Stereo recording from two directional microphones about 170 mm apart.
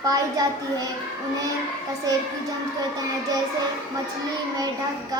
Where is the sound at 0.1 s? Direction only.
20° right (ahead or behind).